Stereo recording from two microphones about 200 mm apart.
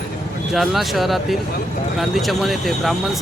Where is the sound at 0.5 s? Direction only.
Centre (ahead or behind).